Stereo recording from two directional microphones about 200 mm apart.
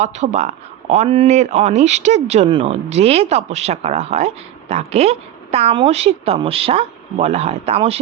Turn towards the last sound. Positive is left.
turn(degrees=-30)  # may be behind; listen again after turning